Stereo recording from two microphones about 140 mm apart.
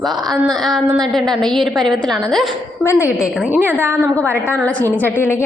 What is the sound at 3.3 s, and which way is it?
Speech, 10° right (ahead or behind).